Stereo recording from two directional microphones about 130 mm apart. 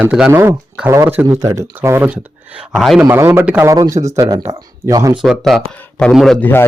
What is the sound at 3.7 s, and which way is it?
Speech, 25° right (ahead or behind).